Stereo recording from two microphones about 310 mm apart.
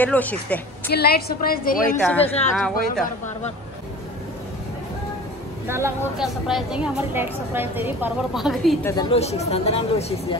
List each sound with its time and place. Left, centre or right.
0.0 s a woman's voice: centre
0.8 s speech: left
2.0 s a woman's voice: centre
2.2 s speech: centre
5.7 s a woman's voice: centre
8.9 s speech: centre